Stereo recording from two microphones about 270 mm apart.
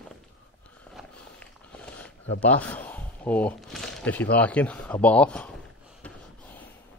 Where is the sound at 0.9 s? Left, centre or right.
Centre.